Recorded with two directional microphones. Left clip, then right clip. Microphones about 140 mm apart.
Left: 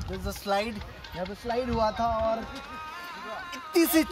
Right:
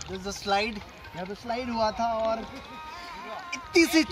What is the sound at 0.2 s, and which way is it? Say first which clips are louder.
Speech: right 2 dB; 25° left (ahead or behind).